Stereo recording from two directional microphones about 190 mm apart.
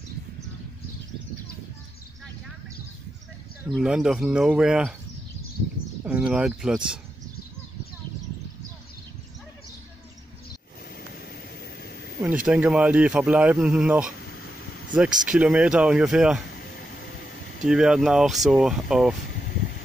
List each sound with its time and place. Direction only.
3.7 s speech: 5° right (ahead or behind)
6.0 s speech: 5° right (ahead or behind)
12.4 s speech: 5° right (ahead or behind)
14.2 s a sound: 60° left (ahead or behind)
14.9 s speech: 5° right (ahead or behind)
16.5 s a sound: 60° left (ahead or behind)
17.6 s speech: 5° right (ahead or behind)